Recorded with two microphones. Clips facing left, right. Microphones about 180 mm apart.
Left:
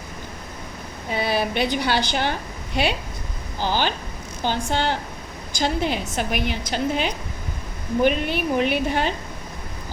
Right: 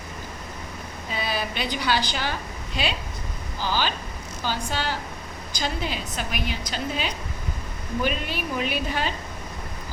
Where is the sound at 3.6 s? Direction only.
20° left (ahead or behind).